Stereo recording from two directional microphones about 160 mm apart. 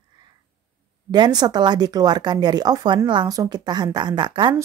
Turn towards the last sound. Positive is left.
turn(degrees=-30)  # may be behind; listen again after turning